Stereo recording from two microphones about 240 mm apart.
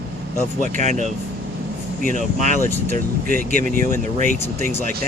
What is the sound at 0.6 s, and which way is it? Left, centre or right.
Speech, right.